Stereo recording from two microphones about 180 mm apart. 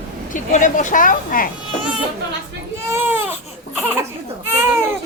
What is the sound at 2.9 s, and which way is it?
Baby cry, 10° right (ahead or behind).